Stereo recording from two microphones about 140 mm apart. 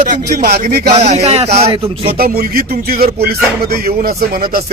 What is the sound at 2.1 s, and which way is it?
Speech, 90° right.